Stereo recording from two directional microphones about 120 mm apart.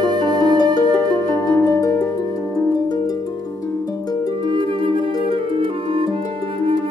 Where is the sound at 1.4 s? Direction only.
30° left (ahead or behind).